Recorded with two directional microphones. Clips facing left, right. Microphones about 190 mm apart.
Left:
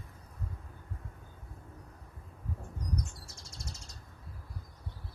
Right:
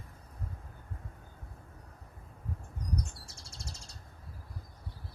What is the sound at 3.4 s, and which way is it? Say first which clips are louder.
Bird: left 1 dB; 30° right (ahead or behind).